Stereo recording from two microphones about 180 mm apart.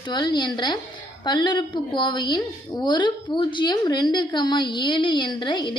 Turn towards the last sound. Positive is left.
turn(degrees=25)  # may be behind; listen again after turning